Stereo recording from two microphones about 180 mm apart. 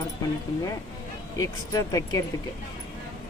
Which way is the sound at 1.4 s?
20° left (ahead or behind).